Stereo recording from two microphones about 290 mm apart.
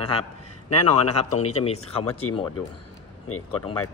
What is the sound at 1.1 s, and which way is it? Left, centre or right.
Speech, left.